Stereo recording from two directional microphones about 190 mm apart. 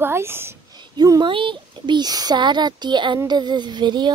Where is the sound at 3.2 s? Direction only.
20° right (ahead or behind).